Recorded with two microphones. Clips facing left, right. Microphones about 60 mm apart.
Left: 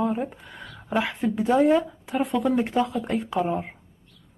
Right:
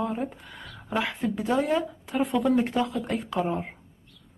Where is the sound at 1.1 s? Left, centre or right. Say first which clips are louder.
Left 6 dB; left.